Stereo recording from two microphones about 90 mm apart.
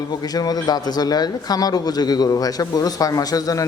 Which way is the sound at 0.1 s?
45° left (ahead or behind).